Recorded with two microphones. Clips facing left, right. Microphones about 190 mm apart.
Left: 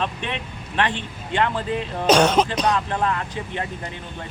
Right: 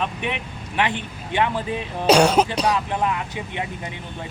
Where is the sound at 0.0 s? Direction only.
10° right (ahead or behind).